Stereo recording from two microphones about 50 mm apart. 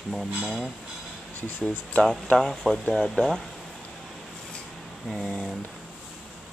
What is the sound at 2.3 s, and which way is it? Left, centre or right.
Speech, centre.